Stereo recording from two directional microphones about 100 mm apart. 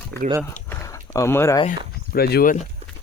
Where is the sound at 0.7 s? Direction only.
30° left (ahead or behind).